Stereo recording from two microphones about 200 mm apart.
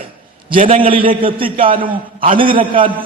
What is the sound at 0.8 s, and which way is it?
A man's voice, 25° right (ahead or behind).